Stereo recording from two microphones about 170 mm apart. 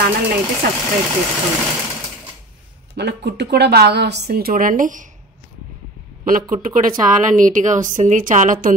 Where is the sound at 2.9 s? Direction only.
80° right; by 5.1 s 50° right (ahead or behind).